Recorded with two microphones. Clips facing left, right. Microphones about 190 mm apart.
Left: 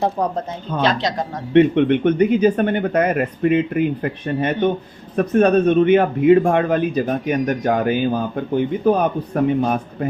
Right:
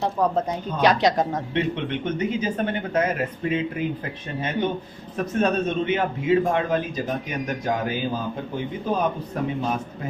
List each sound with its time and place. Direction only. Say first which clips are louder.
0.2 s speech: left 1 dB; 20° left (ahead or behind)
0.8 s speech: right 1 dB; 15° right (ahead or behind)
1.5 s a man's voice: left 14 dB; 60° left (ahead or behind)